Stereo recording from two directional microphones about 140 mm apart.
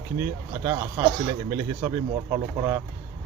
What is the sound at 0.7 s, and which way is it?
Speech, 20° right (ahead or behind).